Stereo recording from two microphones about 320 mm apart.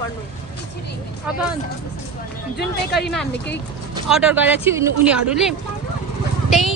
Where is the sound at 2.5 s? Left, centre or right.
Left.